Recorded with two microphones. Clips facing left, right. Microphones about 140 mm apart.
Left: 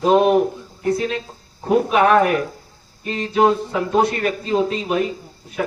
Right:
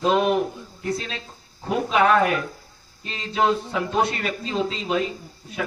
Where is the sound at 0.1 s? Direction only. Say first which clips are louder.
Left 6 dB; 40° left (ahead or behind).